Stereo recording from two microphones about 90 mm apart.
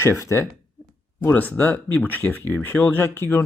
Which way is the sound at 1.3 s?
15° left (ahead or behind).